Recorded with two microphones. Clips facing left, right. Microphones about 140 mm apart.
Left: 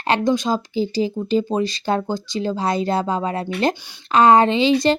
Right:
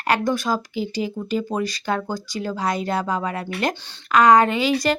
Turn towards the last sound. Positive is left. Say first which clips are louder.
# left 4 dB
turn(degrees=25)  # may be behind; listen again after turning